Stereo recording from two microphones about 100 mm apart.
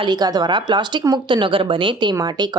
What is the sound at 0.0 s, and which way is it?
Speech, 45° right (ahead or behind).